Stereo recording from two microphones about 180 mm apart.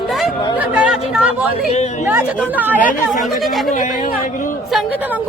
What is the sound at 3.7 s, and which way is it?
Speech, 45° left (ahead or behind).